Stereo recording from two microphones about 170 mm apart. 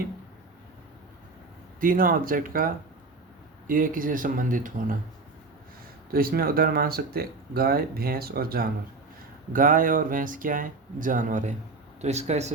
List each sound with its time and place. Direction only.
1.8 s speech: 55° right (ahead or behind)
6.1 s speech: 60° right (ahead or behind); by 12.5 s 40° right (ahead or behind)